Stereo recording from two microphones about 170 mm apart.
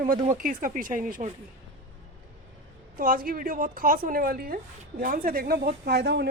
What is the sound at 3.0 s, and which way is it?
Speech, 55° right (ahead or behind).